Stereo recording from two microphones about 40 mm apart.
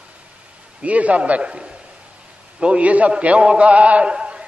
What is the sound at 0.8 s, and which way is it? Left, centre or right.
Speech, right.